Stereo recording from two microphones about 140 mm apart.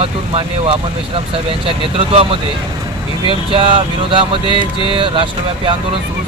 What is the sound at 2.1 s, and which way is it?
Speech, 45° right (ahead or behind).